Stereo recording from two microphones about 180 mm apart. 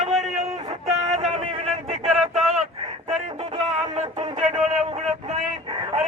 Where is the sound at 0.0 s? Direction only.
Centre (ahead or behind).